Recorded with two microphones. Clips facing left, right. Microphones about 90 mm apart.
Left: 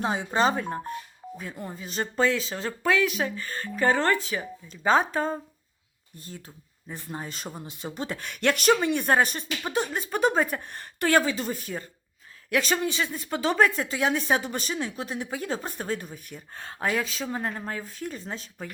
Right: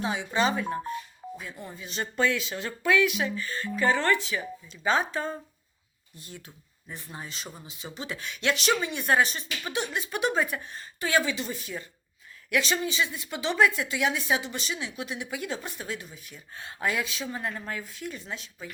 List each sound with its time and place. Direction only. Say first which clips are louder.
0.0 s speech: left 3 dB; 40° left (ahead or behind)
10.6 s speech: left 5 dB; 60° left (ahead or behind)
11.2 s speech: left 3 dB; 40° left (ahead or behind)
16.8 s speech: left 2 dB; 35° left (ahead or behind)